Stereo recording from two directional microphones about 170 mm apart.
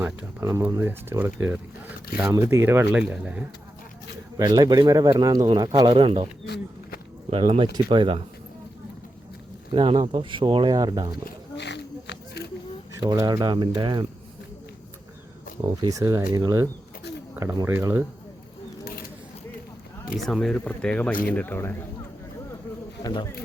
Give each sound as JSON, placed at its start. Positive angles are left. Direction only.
{"t": 0.0, "sound": "speech", "side_deg": -10}
{"t": 0.4, "sound": "speech", "side_deg": -20}
{"t": 4.4, "sound": "speech", "side_deg": -20}
{"t": 7.3, "sound": "speech", "side_deg": -35}
{"t": 9.7, "sound": "speech", "side_deg": -30}
{"t": 11.3, "sound": "a sound", "side_deg": 90}
{"t": 12.9, "sound": "speech", "side_deg": -25}
{"t": 15.6, "sound": "speech", "side_deg": -25}
{"t": 20.1, "sound": "speech", "side_deg": 0}